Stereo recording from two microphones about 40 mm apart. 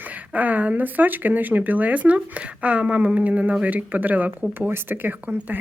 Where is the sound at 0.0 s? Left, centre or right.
Right.